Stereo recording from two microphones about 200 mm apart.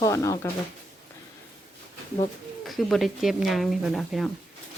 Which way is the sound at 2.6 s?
Centre (ahead or behind).